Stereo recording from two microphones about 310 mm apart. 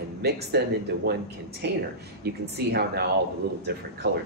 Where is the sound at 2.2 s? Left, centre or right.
Right.